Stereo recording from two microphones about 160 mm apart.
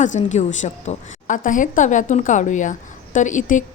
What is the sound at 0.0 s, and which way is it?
A woman's voice, 50° left (ahead or behind).